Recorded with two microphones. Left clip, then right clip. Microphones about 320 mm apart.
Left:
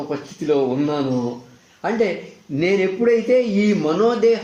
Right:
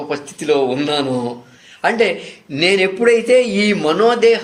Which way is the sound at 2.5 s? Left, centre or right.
Right.